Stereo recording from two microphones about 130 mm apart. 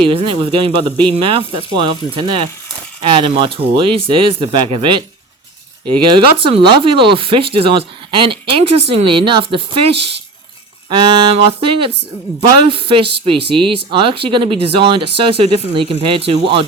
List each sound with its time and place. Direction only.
0.0 s speech: 45° right (ahead or behind)
1.7 s music: 40° right (ahead or behind)
3.0 s speech: 40° right (ahead or behind)
10.8 s music: 40° right (ahead or behind)
12.4 s speech: 45° right (ahead or behind)